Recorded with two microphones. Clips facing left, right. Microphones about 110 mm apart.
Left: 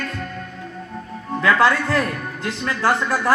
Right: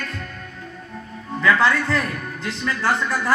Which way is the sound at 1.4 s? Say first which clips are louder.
Left 1 dB; 15° left (ahead or behind).